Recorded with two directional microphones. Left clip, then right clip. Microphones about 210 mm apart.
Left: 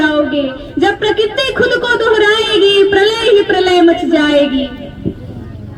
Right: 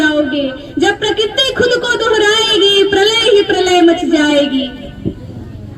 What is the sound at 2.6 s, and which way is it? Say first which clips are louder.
Speech: left 3 dB; 25° right (ahead or behind).